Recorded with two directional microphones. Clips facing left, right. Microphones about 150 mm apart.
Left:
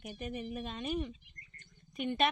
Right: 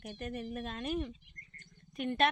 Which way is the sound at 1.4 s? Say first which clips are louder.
Right 1 dB; 45° right (ahead or behind).